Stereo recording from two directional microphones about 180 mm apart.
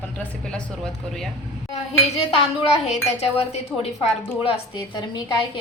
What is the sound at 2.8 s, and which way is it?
A woman's voice, 35° left (ahead or behind).